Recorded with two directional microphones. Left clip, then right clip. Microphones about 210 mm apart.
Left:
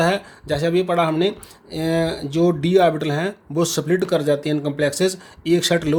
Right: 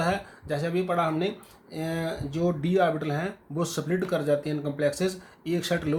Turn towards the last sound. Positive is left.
turn(degrees=40)  # may be behind; listen again after turning